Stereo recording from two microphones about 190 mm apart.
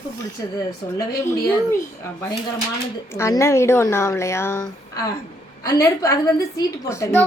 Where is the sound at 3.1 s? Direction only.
15° left (ahead or behind).